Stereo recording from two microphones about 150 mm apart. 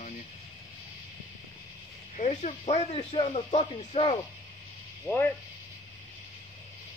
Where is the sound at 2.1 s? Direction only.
45° left (ahead or behind).